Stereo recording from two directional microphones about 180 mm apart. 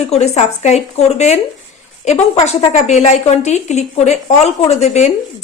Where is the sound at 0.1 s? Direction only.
35° left (ahead or behind).